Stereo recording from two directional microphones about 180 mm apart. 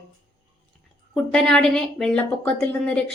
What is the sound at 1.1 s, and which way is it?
Speech, 5° left (ahead or behind).